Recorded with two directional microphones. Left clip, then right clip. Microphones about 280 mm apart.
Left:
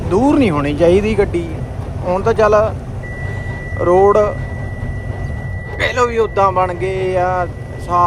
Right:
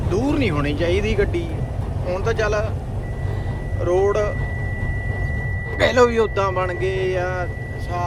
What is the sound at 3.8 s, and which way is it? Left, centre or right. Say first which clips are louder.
Speech: left 8 dB; centre.